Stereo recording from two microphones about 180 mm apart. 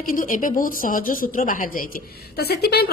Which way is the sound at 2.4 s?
60° left (ahead or behind).